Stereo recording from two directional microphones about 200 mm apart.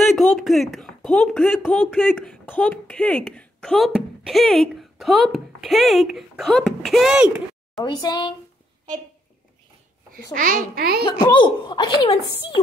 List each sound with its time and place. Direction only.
0.0 s speech: centre (ahead or behind)
7.8 s speech: 20° left (ahead or behind)
10.3 s a child's voice: 45° right (ahead or behind)
11.1 s speech: 25° left (ahead or behind)